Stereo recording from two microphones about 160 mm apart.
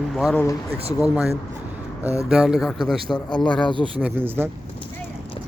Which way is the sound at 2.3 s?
5° right (ahead or behind).